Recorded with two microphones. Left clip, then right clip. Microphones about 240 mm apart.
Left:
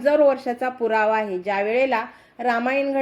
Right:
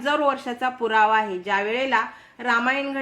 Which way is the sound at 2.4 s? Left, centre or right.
Centre.